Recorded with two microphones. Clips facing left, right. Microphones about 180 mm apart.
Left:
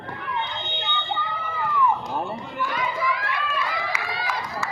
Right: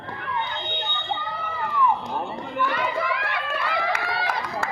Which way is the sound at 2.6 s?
65° right (ahead or behind).